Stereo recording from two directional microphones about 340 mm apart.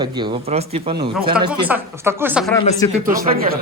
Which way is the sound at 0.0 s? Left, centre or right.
Centre.